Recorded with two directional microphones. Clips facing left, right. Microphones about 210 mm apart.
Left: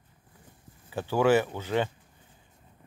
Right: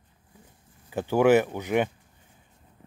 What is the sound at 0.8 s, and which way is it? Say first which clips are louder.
Speech: right 3 dB; 15° right (ahead or behind).